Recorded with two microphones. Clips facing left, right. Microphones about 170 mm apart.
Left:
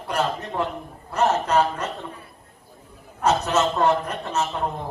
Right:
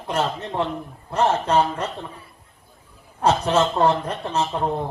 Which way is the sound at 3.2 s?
30° right (ahead or behind).